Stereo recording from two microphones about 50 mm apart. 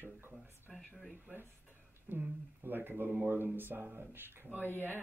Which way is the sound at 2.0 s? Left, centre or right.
Right.